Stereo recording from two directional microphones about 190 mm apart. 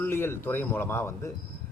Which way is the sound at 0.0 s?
10° left (ahead or behind).